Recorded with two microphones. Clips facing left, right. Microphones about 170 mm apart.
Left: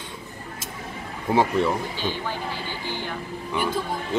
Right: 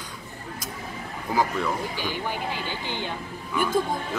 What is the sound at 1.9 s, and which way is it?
Speech, 15° right (ahead or behind).